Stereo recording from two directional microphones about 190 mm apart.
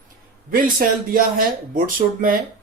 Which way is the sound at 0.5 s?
50° right (ahead or behind).